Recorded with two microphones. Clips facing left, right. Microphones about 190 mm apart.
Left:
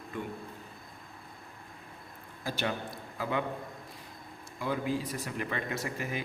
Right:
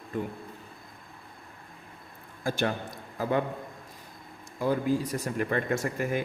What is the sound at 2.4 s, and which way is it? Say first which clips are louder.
Speech: right 5 dB; 50° right (ahead or behind).